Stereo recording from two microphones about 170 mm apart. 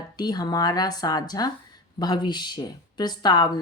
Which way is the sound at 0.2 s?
25° left (ahead or behind).